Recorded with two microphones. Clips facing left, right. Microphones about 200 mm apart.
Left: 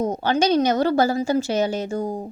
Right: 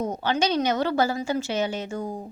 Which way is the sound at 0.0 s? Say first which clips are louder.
Left 4 dB; 40° left (ahead or behind).